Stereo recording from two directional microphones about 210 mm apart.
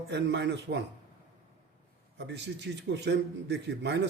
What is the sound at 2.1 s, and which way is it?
A man's voice, 55° right (ahead or behind).